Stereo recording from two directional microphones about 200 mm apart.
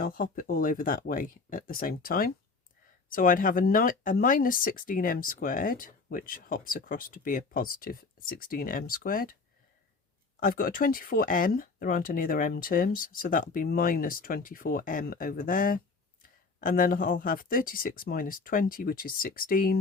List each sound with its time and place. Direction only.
0.0 s speech: 45° left (ahead or behind)
10.4 s speech: 45° left (ahead or behind)